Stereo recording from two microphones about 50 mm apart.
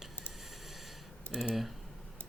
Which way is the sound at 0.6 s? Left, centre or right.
Centre.